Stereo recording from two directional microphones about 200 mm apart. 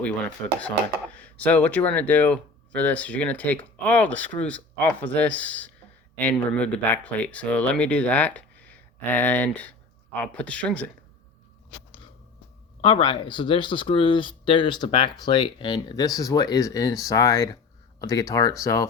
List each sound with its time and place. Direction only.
0.6 s speech: 5° left (ahead or behind)
12.8 s speech: 25° left (ahead or behind)